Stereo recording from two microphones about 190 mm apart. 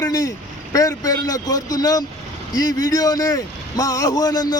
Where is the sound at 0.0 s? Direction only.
20° left (ahead or behind).